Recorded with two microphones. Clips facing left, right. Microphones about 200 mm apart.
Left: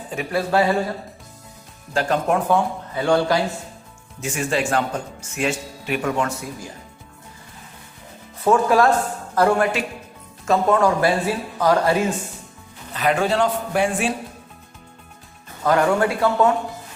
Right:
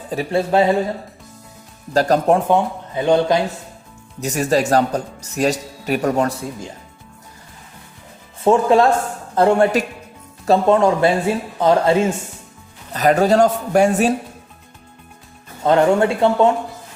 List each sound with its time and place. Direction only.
0.1 s speech: 30° right (ahead or behind)
1.9 s speech: 40° right (ahead or behind)
2.5 s speech: 20° right (ahead or behind)
4.2 s speech: 40° right (ahead or behind)
8.4 s a man's voice: 25° right (ahead or behind)
12.9 s speech: 40° right (ahead or behind)
15.6 s speech: 25° right (ahead or behind)